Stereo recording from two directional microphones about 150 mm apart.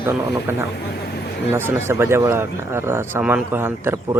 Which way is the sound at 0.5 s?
15° right (ahead or behind).